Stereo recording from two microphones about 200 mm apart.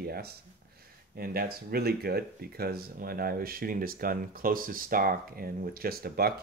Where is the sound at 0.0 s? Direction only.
50° right (ahead or behind).